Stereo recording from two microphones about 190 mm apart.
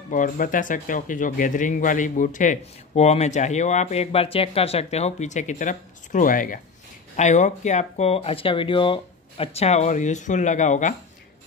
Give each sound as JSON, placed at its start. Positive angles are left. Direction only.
{"t": 0.1, "sound": "speech", "side_deg": 45}